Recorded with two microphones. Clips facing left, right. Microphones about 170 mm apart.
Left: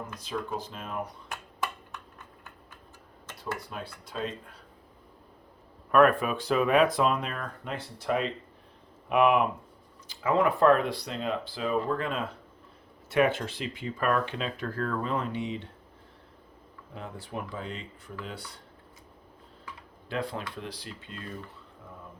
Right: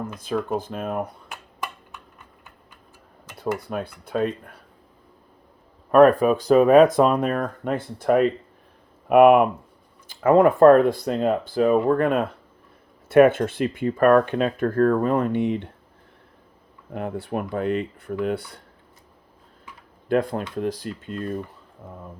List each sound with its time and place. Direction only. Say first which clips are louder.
0.2 s speech: right 9 dB; 50° right (ahead or behind)
3.4 s speech: right 10 dB; 55° right (ahead or behind)
5.9 s speech: right 8 dB; 35° right (ahead or behind); by 15.7 s 55° right (ahead or behind)
16.9 s speech: right 11 dB; 60° right (ahead or behind)
20.1 s speech: right 11 dB; 50° right (ahead or behind)